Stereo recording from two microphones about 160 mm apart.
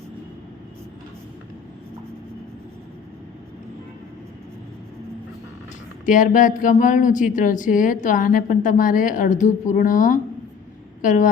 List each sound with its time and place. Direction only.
6.1 s speech: 55° left (ahead or behind)